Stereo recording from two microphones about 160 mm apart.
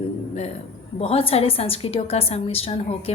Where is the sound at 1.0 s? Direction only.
35° left (ahead or behind).